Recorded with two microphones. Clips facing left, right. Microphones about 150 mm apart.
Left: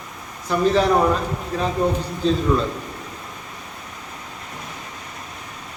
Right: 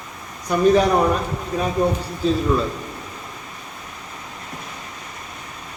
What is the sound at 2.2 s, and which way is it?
Speech, 5° right (ahead or behind).